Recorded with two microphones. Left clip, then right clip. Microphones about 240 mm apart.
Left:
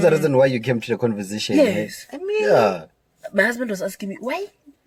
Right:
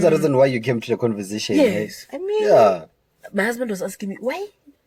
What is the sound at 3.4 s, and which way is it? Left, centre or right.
Speech, centre.